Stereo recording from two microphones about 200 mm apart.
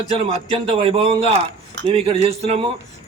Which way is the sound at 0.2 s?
30° right (ahead or behind).